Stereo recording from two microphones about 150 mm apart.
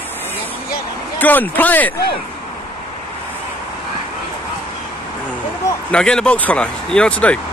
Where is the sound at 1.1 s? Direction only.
10° left (ahead or behind).